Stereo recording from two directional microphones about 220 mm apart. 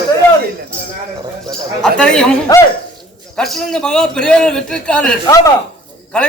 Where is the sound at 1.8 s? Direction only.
5° left (ahead or behind).